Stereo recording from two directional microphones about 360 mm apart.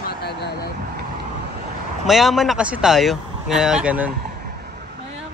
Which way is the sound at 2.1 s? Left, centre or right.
Centre.